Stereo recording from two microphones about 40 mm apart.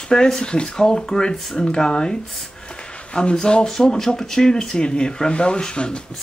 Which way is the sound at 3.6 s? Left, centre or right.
Centre.